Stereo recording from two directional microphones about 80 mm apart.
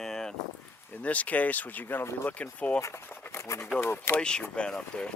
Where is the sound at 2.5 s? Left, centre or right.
Centre.